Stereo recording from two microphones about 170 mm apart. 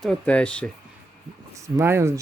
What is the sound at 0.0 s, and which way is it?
Speech, 5° left (ahead or behind).